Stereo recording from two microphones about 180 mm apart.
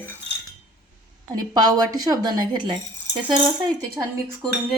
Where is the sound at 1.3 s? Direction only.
20° right (ahead or behind).